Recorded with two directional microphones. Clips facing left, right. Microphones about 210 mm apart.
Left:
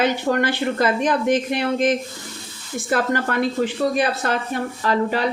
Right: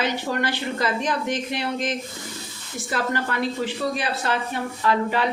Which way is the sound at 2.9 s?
50° left (ahead or behind).